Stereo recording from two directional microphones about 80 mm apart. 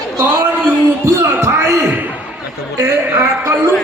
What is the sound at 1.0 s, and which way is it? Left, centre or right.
Music, right.